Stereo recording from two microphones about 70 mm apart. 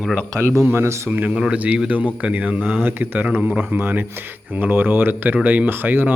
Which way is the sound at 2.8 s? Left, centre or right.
Right.